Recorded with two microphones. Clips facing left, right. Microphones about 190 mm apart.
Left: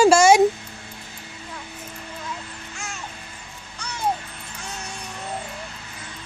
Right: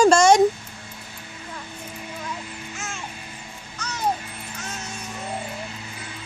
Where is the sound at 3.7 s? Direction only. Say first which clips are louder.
Right 2 dB; 10° left (ahead or behind).